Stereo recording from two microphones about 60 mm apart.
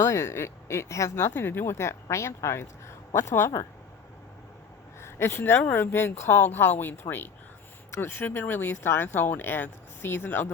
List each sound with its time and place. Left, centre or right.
0.0 s speech: left
1.3 s speech: left
4.9 s speech: left
7.9 s a sound: left
8.2 s speech: left